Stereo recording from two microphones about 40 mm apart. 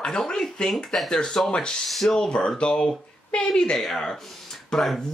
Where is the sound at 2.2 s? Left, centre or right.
Left.